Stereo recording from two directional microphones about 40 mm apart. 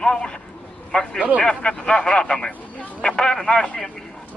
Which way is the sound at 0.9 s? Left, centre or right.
Left.